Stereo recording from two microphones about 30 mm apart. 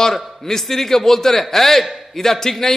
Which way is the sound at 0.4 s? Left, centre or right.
Centre.